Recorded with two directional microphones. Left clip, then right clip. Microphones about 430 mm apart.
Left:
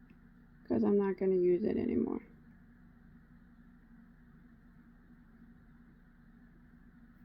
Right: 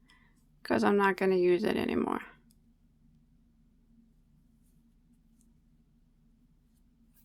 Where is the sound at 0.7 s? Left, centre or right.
Right.